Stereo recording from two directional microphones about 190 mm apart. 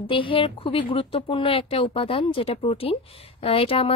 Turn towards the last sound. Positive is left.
turn(degrees=30)  # may be behind; listen again after turning